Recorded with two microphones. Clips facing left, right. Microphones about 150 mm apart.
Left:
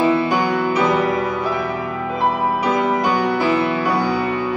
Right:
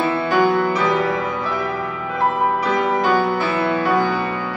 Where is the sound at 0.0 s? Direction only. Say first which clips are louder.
Left 1 dB; 10° left (ahead or behind).